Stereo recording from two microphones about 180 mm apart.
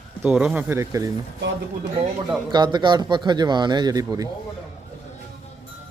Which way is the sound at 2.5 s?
25° right (ahead or behind).